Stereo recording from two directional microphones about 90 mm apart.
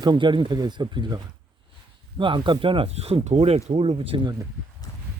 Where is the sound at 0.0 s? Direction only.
55° right (ahead or behind); by 4.3 s 90° right.